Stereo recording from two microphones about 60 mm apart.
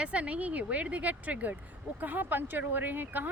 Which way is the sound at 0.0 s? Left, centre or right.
Right.